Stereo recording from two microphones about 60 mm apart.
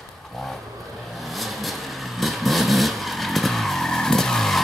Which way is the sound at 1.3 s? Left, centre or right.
Centre.